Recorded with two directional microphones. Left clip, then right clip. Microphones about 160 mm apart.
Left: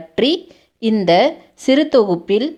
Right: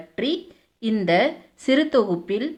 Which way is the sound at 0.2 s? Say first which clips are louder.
Left 9 dB; 40° left (ahead or behind).